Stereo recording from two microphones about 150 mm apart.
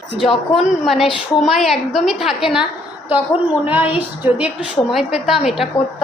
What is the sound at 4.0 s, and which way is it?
A woman's voice, 10° right (ahead or behind).